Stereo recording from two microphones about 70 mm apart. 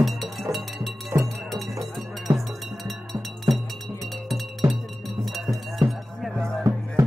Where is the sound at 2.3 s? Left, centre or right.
Right.